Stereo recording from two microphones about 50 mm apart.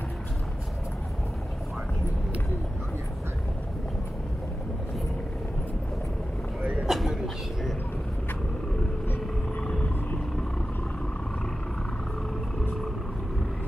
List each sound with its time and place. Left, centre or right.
6.6 s vehicle: right
6.9 s vehicle: centre
9.6 s vehicle: left